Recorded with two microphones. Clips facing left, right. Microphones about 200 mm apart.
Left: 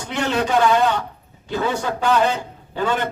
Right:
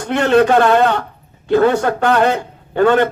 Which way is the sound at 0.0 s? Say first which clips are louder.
Right 9 dB; 60° right (ahead or behind).